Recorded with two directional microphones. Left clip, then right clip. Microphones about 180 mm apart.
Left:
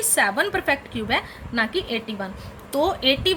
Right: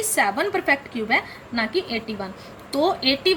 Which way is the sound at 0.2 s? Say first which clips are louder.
Even; 25° left (ahead or behind).